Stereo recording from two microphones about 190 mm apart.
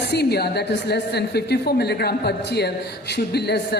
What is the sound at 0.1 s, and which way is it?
A man's voice, 60° left (ahead or behind).